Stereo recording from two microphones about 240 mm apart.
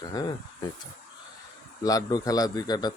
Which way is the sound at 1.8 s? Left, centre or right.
Centre.